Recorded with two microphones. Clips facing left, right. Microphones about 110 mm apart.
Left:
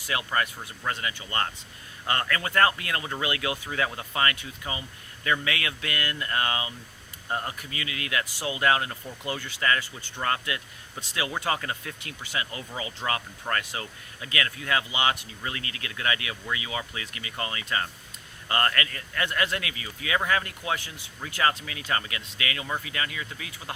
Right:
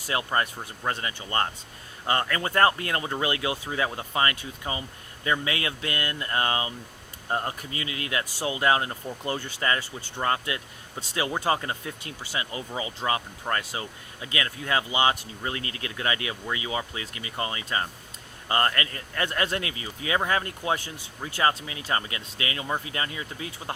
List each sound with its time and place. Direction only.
0.1 s speech: 30° right (ahead or behind)